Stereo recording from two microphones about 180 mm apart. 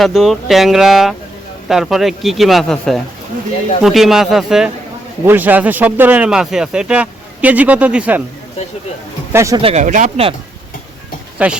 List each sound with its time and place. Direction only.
0.0 s speech: centre (ahead or behind)
9.3 s speech: 15° right (ahead or behind)
9.6 s speech: 30° right (ahead or behind)
9.8 s speech: 45° right (ahead or behind)
11.4 s speech: 5° right (ahead or behind)